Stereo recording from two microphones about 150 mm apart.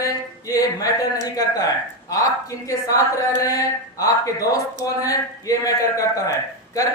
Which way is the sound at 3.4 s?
25° left (ahead or behind).